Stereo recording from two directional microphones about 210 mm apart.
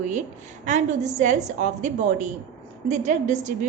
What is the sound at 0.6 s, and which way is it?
A woman's voice, 35° right (ahead or behind).